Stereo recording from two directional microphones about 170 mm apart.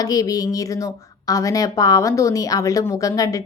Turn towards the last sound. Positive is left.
turn(degrees=20)  # may be behind; listen again after turning